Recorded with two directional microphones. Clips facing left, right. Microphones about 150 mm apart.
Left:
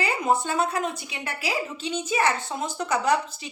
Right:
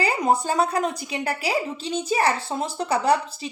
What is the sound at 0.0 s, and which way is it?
A woman's voice, 35° right (ahead or behind).